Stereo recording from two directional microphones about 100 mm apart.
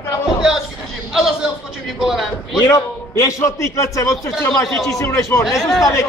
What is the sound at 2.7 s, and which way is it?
A man's voice, 30° left (ahead or behind).